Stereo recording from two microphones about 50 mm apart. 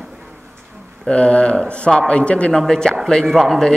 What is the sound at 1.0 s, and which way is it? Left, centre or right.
Speech, left.